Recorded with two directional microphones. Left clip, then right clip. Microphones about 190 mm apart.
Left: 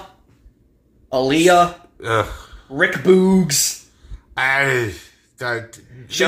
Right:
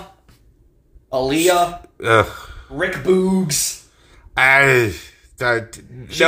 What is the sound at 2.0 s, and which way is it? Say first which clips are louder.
Speech: right 5 dB; 50° right (ahead or behind).